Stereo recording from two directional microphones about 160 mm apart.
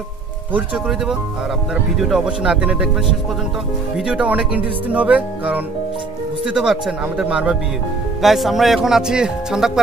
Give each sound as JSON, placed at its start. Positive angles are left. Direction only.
{"t": 0.5, "sound": "speech", "side_deg": -5}
{"t": 3.9, "sound": "speech", "side_deg": -5}